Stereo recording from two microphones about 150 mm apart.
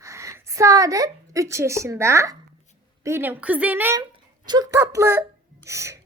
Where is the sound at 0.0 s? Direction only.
20° right (ahead or behind).